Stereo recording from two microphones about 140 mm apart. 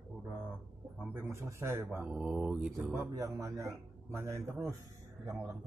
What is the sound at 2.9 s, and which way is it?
A man's voice, 20° right (ahead or behind).